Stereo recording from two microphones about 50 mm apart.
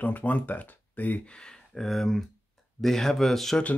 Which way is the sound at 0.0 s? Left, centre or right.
Left.